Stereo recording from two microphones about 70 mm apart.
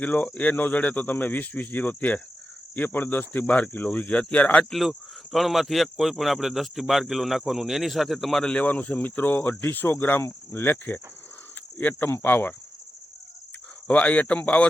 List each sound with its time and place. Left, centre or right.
0.0 s speech: centre
4.7 s speech: centre
8.4 s speech: left
13.8 s speech: centre